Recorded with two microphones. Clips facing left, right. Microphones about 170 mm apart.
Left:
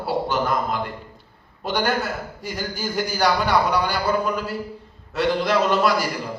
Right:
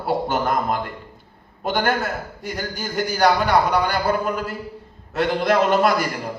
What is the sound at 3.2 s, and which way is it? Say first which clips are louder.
A man's voice: right 3 dB; 50° right (ahead or behind).